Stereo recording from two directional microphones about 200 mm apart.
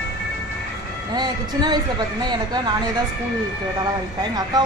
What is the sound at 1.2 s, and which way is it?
Speech, 20° right (ahead or behind).